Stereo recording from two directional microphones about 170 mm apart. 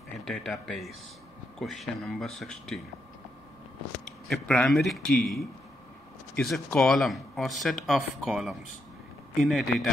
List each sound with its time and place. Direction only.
0.2 s speech: centre (ahead or behind)
4.3 s speech: 5° left (ahead or behind)